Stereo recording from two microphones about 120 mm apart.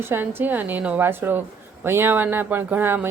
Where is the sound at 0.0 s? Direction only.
20° right (ahead or behind).